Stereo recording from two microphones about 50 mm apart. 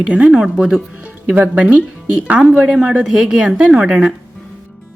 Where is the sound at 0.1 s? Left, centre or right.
Right.